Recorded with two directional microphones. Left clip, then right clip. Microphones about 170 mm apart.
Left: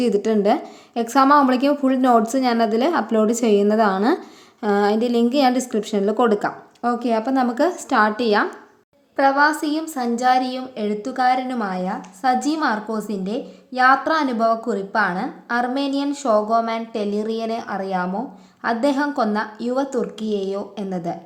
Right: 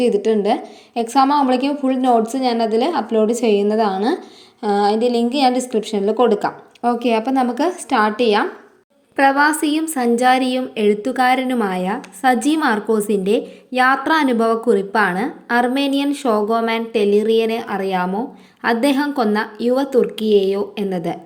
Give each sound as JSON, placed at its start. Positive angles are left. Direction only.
{"t": 0.0, "sound": "a woman's voice", "side_deg": 15}
{"t": 9.1, "sound": "a woman's voice", "side_deg": -10}